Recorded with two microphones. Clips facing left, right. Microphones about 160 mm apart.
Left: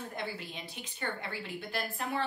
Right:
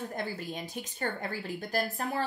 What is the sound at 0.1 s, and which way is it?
A woman's voice, 45° right (ahead or behind).